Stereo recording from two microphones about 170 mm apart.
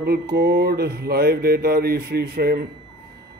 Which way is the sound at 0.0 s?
65° right (ahead or behind).